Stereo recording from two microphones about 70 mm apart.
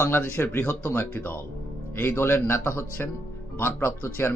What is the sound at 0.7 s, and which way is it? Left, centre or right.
Speech, left.